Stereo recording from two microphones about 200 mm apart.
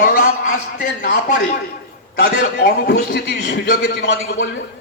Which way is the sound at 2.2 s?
50° left (ahead or behind).